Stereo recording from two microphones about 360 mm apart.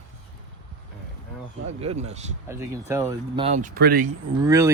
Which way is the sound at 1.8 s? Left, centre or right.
Centre.